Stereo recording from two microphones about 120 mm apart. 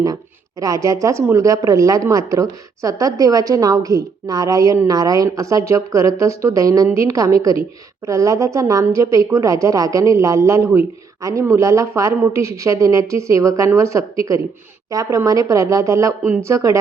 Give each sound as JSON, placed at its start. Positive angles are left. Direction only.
{"t": 0.6, "sound": "a woman's voice", "side_deg": -30}